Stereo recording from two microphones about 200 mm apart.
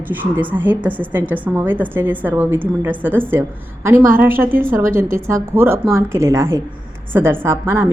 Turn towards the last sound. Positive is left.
turn(degrees=-10)  # may be behind; listen again after turning